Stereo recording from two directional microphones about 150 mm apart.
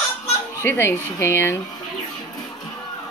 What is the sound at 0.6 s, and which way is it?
Speech, 15° left (ahead or behind).